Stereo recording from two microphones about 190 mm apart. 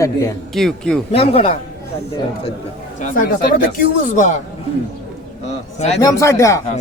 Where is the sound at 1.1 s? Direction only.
30° left (ahead or behind).